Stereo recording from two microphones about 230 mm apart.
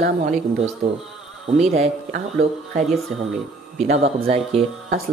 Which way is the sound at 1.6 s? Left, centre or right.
Right.